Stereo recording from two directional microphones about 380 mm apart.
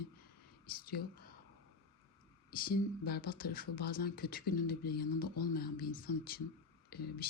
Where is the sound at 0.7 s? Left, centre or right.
Left.